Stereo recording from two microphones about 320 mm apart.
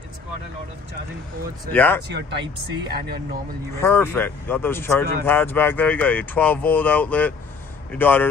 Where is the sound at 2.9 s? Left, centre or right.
Right.